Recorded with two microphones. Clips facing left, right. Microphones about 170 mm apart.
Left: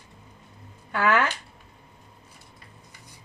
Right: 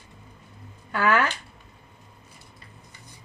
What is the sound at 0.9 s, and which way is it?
Speech, 20° left (ahead or behind).